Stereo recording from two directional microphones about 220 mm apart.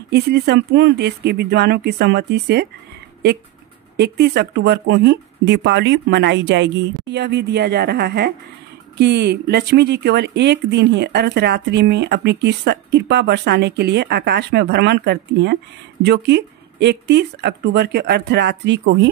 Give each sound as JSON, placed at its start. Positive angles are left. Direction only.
{"t": 0.1, "sound": "speech", "side_deg": -50}
{"t": 3.9, "sound": "speech", "side_deg": -50}